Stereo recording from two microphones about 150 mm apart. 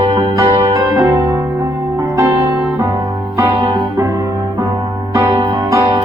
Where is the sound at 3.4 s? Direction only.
30° right (ahead or behind).